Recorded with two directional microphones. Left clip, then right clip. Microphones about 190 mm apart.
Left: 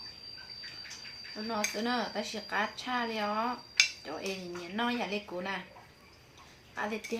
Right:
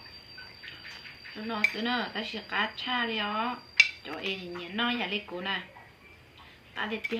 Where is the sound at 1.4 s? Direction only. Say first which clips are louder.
Right 4 dB; 15° left (ahead or behind).